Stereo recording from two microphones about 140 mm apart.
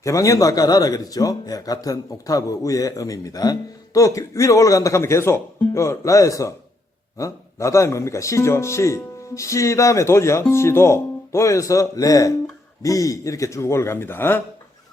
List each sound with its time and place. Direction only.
0.0 s a man's voice: 25° left (ahead or behind)